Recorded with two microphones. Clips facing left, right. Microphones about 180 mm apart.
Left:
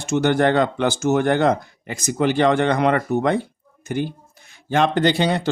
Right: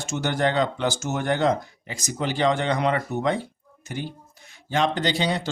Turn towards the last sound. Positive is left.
turn(degrees=55)  # may be behind; listen again after turning